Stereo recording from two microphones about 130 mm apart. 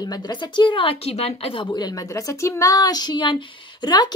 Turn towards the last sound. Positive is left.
turn(degrees=35)  # may be behind; listen again after turning